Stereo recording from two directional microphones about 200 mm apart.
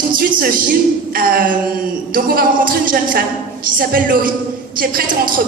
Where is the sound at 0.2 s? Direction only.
45° right (ahead or behind).